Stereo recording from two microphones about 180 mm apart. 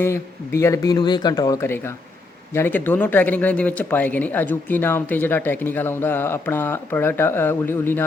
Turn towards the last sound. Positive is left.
turn(degrees=10)  # may be behind; listen again after turning